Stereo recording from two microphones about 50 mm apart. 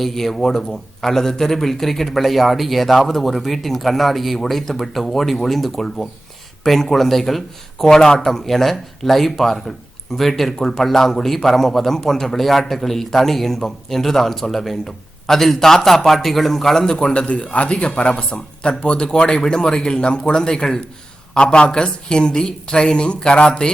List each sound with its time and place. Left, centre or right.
0.0 s a man's voice: centre